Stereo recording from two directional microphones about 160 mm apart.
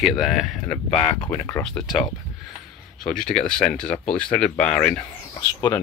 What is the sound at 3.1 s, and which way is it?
Speech, 5° left (ahead or behind).